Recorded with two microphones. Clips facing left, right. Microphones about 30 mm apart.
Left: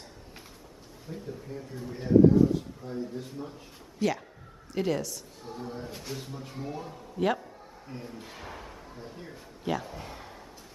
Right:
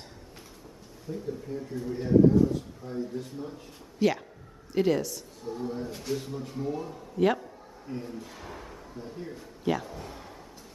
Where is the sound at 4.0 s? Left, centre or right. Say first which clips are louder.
Right 3 dB; centre.